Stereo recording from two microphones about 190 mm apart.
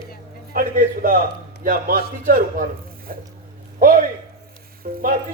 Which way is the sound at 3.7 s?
45° right (ahead or behind).